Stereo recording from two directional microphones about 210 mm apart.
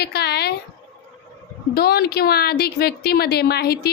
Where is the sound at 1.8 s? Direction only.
50° left (ahead or behind).